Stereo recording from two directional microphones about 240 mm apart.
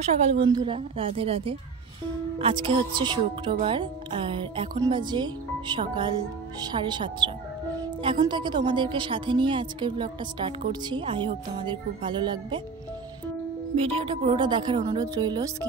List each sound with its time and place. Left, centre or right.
0.0 s a woman's voice: centre
13.7 s a woman's voice: right